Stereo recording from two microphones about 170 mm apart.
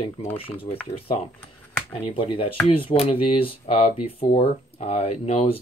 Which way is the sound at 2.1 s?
35° left (ahead or behind).